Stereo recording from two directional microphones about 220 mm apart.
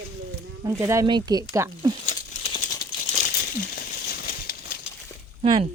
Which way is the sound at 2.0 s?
30° left (ahead or behind).